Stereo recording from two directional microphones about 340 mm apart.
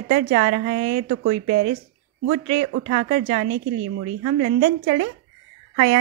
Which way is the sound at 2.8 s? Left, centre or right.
Right.